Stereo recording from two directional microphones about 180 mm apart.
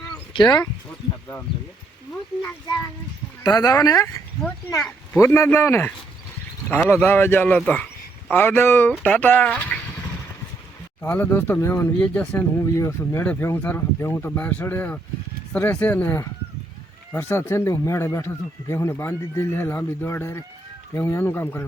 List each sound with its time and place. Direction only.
0.1 s a sound: 25° left (ahead or behind)
3.4 s speech: 20° left (ahead or behind)
11.0 s speech: 10° left (ahead or behind)